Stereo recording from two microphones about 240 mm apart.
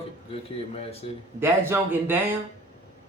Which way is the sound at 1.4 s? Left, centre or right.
Centre.